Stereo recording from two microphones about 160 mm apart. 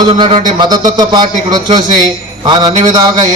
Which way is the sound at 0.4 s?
25° right (ahead or behind).